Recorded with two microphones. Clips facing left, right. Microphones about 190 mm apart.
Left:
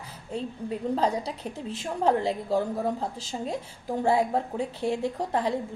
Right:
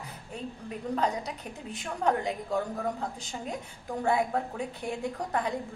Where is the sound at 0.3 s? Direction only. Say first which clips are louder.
Left 7 dB; 30° left (ahead or behind).